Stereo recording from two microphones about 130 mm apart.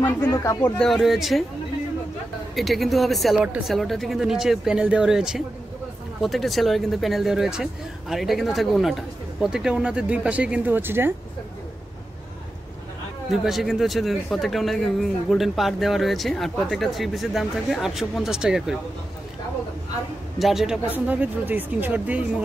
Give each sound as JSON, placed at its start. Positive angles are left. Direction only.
{"t": 0.0, "sound": "speech", "side_deg": 20}
{"t": 0.7, "sound": "speech", "side_deg": 0}
{"t": 2.5, "sound": "speech", "side_deg": 0}
{"t": 13.3, "sound": "speech", "side_deg": 0}
{"t": 20.3, "sound": "speech", "side_deg": 0}